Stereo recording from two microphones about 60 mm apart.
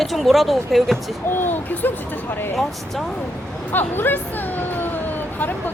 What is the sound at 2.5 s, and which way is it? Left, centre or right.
Speech, centre.